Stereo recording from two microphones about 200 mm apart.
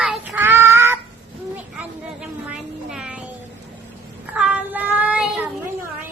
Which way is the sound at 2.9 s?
5° right (ahead or behind).